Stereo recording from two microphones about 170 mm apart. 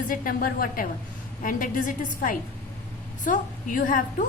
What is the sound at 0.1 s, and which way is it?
A woman's voice, 55° left (ahead or behind).